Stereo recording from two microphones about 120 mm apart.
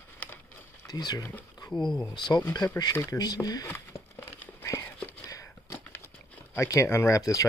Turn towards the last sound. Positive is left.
turn(degrees=30)  # may be behind; listen again after turning